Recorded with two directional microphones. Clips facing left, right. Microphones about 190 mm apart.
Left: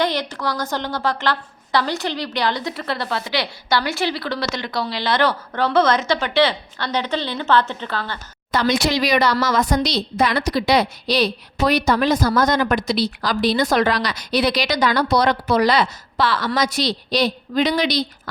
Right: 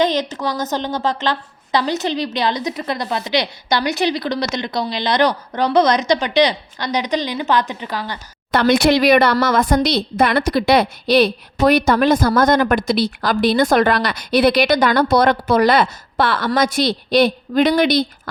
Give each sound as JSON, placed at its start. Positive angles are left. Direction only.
{"t": 0.0, "sound": "a woman's voice", "side_deg": -20}
{"t": 8.5, "sound": "a woman's voice", "side_deg": -55}